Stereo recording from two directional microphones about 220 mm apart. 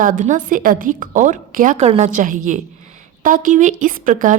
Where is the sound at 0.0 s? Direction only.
35° right (ahead or behind).